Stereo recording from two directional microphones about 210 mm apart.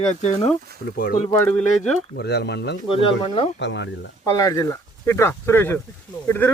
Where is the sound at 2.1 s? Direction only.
50° left (ahead or behind).